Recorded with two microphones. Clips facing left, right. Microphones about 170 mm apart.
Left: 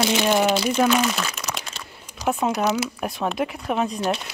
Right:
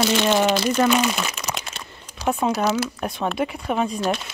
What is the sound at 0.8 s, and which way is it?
Speech, 5° right (ahead or behind).